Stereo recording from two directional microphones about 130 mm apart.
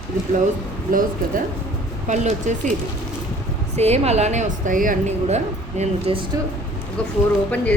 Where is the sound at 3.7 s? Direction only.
55° right (ahead or behind).